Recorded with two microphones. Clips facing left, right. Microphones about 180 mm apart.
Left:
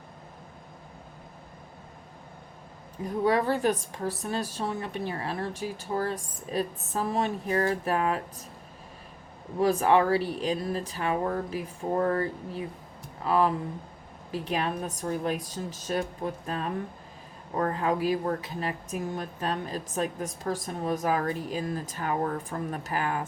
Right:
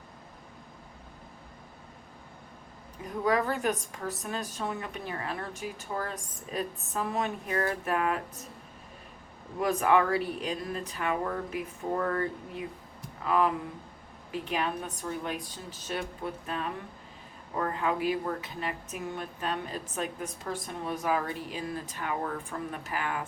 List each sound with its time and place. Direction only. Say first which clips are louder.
3.2 s speech: left 3 dB; 30° left (ahead or behind)
9.6 s speech: left 3 dB; 30° left (ahead or behind)